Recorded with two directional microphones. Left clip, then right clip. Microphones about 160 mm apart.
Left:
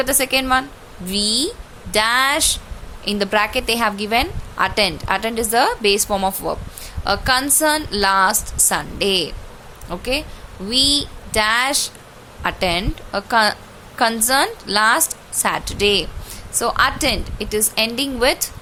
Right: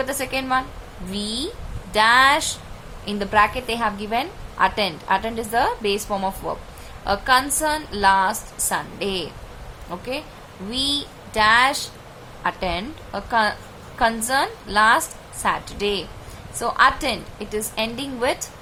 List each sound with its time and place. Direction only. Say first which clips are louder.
0.0 s a woman's voice: left 6 dB; 40° left (ahead or behind)